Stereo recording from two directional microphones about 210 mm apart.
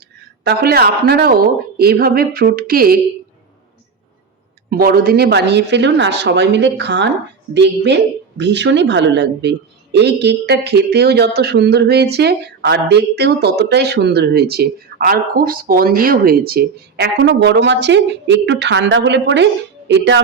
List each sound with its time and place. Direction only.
0.4 s a woman's voice: 50° right (ahead or behind)
4.7 s a woman's voice: 45° right (ahead or behind)